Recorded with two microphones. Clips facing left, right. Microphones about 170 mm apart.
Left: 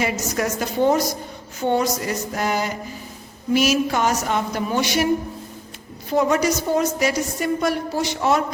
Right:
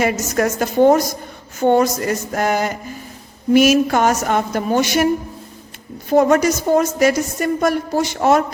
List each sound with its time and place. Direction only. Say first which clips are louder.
0.0 s a woman's voice: right 5 dB; 50° right (ahead or behind)
6.1 s a woman's voice: right 5 dB; 50° right (ahead or behind)